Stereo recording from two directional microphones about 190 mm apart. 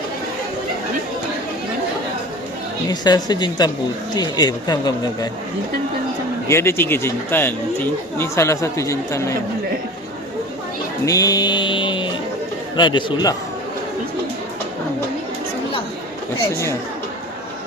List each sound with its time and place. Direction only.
2.9 s speech: 20° left (ahead or behind)
6.5 s speech: 15° left (ahead or behind)
11.0 s music: 20° left (ahead or behind)
12.7 s speech: 25° left (ahead or behind)